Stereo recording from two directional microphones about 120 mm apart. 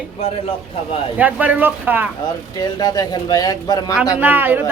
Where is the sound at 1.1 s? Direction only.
15° right (ahead or behind).